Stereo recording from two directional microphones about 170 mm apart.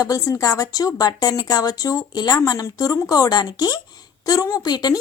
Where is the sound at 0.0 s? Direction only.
20° left (ahead or behind).